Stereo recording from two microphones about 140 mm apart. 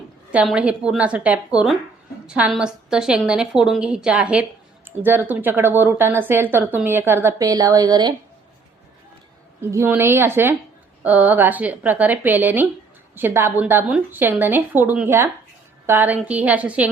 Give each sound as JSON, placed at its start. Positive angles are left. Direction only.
{"t": 0.3, "sound": "speech", "side_deg": -10}
{"t": 9.6, "sound": "speech", "side_deg": -15}